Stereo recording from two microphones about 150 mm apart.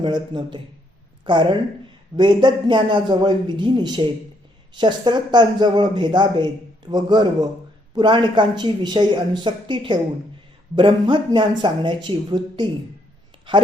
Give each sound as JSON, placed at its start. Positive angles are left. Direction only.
{"t": 0.0, "sound": "a woman's voice", "side_deg": -30}